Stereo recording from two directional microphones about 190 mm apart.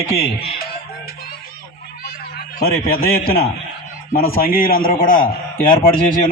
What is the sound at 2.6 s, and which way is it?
A man's voice, 50° left (ahead or behind).